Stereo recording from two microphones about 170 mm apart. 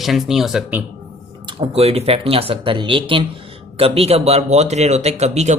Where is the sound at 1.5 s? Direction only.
35° right (ahead or behind).